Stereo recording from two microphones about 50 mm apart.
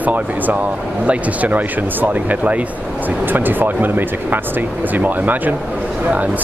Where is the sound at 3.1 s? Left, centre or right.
Right.